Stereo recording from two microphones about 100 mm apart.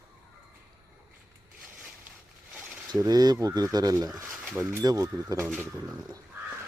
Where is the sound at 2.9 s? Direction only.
40° right (ahead or behind).